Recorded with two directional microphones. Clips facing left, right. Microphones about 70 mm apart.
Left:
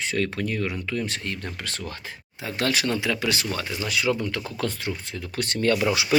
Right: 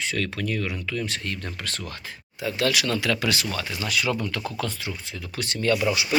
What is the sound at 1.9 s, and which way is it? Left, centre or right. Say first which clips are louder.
Speech: left 1 dB; left.